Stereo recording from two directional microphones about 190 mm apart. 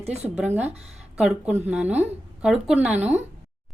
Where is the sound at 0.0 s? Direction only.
35° right (ahead or behind).